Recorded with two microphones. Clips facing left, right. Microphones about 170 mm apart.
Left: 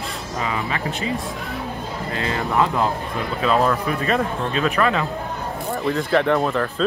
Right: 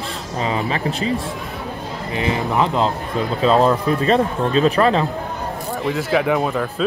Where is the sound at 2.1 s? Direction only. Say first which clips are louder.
Right 3 dB; 20° right (ahead or behind).